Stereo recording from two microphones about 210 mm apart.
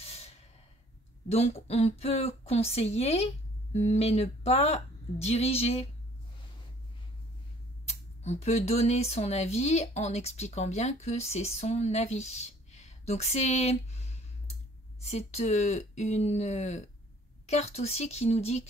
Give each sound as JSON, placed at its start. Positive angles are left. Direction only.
{"t": 0.0, "sound": "snort", "side_deg": 30}
{"t": 1.3, "sound": "a woman's voice", "side_deg": 30}
{"t": 7.8, "sound": "speech", "side_deg": 30}